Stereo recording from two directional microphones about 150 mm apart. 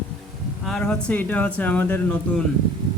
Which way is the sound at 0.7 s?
5° left (ahead or behind).